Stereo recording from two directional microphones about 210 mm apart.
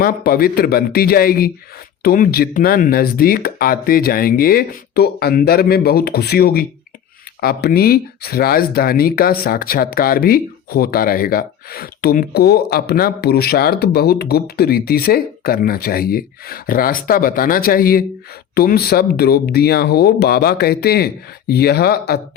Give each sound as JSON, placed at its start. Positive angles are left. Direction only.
{"t": 0.0, "sound": "speech", "side_deg": 45}